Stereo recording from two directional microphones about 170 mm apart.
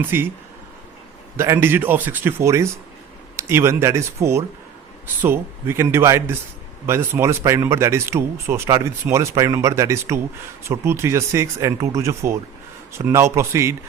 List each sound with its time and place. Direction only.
0.1 s speech: 15° right (ahead or behind)
1.4 s speech: 15° right (ahead or behind)